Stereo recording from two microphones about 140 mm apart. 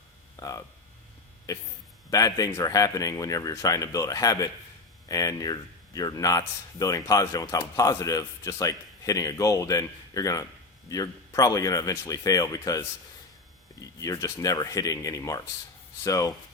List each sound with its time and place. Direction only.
0.3 s a man's voice: 25° left (ahead or behind)
14.0 s a man's voice: 25° left (ahead or behind)